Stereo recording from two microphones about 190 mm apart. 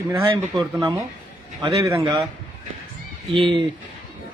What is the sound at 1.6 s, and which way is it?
Speech, 15° right (ahead or behind).